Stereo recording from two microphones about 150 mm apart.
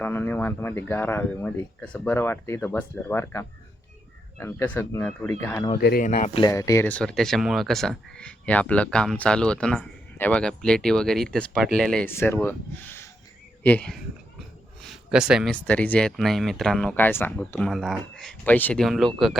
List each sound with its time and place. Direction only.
0.0 s speech: 15° left (ahead or behind)
5.7 s speech: 75° left (ahead or behind)
6.1 s speech: 50° left (ahead or behind)
6.4 s speech: 20° left (ahead or behind); by 12.0 s 5° left (ahead or behind)
12.0 s speech: 15° left (ahead or behind)
14.8 s a sound: centre (ahead or behind)
15.6 s speech: 10° left (ahead or behind)